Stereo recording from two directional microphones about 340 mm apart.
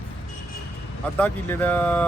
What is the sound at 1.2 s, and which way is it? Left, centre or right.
Speech, centre.